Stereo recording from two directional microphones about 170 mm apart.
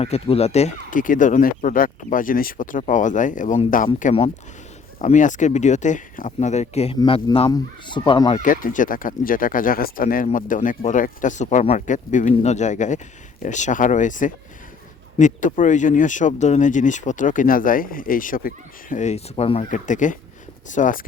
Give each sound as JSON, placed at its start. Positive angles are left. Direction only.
{"t": 0.0, "sound": "speech", "side_deg": 35}
{"t": 7.0, "sound": "a man's voice", "side_deg": 30}
{"t": 8.4, "sound": "speech", "side_deg": 50}